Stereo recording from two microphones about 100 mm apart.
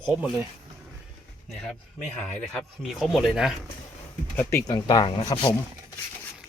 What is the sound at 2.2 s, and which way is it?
Speech, 10° left (ahead or behind).